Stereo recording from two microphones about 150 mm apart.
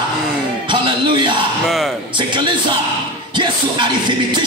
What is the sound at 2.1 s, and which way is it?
Speech, 30° right (ahead or behind).